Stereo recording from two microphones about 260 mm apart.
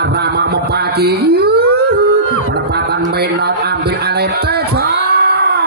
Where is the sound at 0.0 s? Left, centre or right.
Right.